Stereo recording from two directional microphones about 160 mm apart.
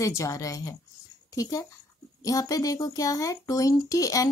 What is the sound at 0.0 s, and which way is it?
A child's voice, 20° left (ahead or behind).